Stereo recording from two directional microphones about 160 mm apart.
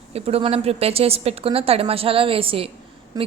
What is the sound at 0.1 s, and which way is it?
A woman's voice, 40° right (ahead or behind).